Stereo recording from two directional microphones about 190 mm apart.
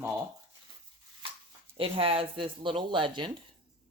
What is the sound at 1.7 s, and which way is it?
A woman's voice, 30° right (ahead or behind).